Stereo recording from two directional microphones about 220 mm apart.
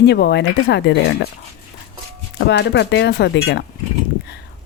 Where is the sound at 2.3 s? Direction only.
50° left (ahead or behind).